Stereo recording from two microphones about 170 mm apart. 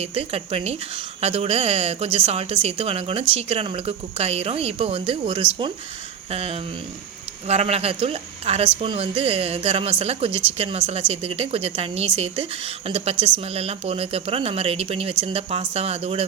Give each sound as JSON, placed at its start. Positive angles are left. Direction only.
{"t": 0.0, "sound": "a woman's voice", "side_deg": -35}